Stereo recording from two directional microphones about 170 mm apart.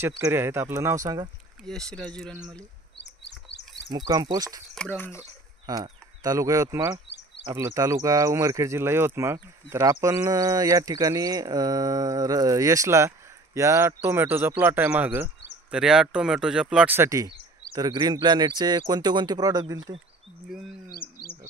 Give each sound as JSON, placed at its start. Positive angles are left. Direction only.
{"t": 0.2, "sound": "speech", "side_deg": -15}
{"t": 1.6, "sound": "speech", "side_deg": 0}
{"t": 3.0, "sound": "bird", "side_deg": 90}
{"t": 3.9, "sound": "speech", "side_deg": -20}
{"t": 4.7, "sound": "speech", "side_deg": 10}
{"t": 5.7, "sound": "speech", "side_deg": -20}
{"t": 20.4, "sound": "speech", "side_deg": 0}